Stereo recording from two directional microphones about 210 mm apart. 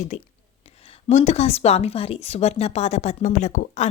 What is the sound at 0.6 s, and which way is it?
Speech, 30° left (ahead or behind).